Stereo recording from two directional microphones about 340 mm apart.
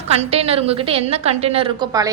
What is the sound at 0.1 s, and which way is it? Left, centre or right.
A woman's voice, centre.